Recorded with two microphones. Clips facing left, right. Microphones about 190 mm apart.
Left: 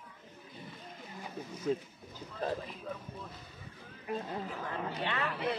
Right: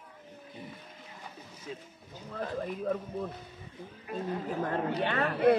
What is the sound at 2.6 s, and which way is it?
Speech, 50° right (ahead or behind).